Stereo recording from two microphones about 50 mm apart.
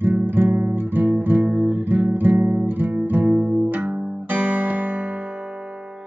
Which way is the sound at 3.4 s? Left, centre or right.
Right.